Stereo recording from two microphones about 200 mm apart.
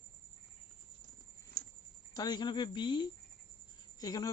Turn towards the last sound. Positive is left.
turn(degrees=20)  # may be behind; listen again after turning